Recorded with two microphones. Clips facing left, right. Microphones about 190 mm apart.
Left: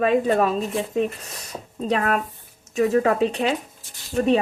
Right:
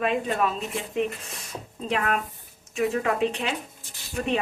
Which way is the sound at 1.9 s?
40° left (ahead or behind).